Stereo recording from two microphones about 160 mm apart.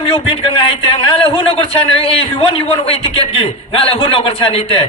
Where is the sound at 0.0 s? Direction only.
35° left (ahead or behind).